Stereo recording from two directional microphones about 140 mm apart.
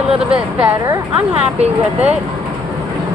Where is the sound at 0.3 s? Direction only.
10° right (ahead or behind).